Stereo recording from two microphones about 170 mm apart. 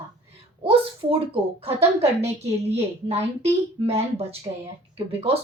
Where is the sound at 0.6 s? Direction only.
35° right (ahead or behind).